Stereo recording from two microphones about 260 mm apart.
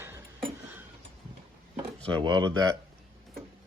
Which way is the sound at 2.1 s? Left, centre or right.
Centre.